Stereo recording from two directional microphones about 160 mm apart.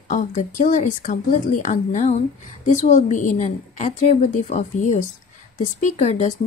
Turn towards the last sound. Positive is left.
turn(degrees=45)  # may be behind; listen again after turning